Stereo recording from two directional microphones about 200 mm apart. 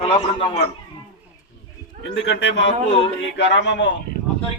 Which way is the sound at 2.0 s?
65° left (ahead or behind).